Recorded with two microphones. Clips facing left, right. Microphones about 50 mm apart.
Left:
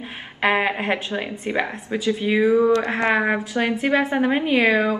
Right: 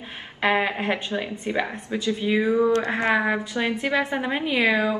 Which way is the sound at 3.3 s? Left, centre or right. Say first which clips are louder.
Left 3 dB; left.